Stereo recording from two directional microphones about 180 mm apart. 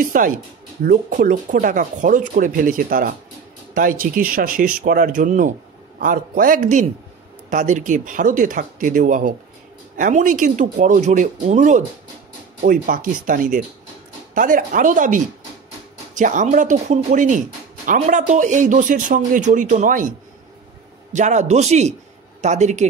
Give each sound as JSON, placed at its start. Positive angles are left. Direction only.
{"t": 0.0, "sound": "a man's voice", "side_deg": -50}